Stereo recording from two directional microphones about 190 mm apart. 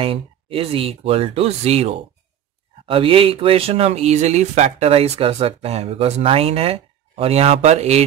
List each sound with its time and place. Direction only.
0.0 s speech: 30° right (ahead or behind)